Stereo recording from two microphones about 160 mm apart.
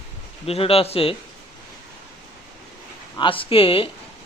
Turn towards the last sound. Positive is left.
turn(degrees=35)  # may be behind; listen again after turning